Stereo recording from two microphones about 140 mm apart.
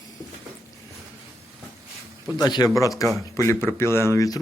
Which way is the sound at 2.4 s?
30° left (ahead or behind).